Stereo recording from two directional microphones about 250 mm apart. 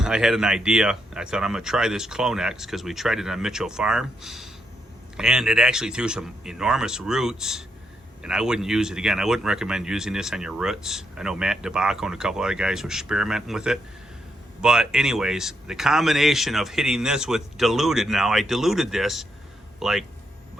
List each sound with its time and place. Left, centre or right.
0.0 s speech: centre